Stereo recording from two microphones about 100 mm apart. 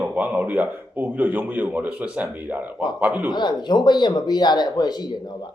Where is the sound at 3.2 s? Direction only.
45° left (ahead or behind).